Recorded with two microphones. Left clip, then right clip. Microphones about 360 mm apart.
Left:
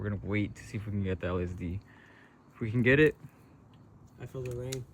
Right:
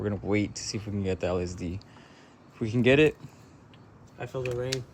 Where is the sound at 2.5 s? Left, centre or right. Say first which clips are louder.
Right 3 dB; centre.